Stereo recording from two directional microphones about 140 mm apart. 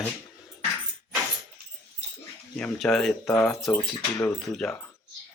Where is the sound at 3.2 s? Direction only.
15° left (ahead or behind); by 4.7 s centre (ahead or behind).